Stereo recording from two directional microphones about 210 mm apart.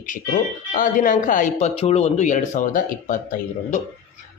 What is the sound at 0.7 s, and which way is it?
Speech, 40° left (ahead or behind).